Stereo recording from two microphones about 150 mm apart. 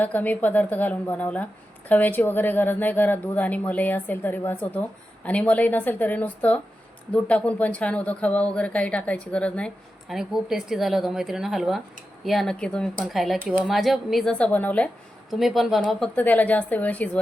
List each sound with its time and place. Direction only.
0.0 s a woman's voice: 10° left (ahead or behind)
15.3 s speech: centre (ahead or behind)
16.1 s a woman's voice: 10° left (ahead or behind)